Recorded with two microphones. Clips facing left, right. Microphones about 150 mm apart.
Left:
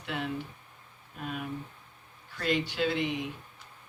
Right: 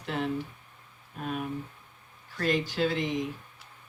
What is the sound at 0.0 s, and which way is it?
Speech, 35° right (ahead or behind).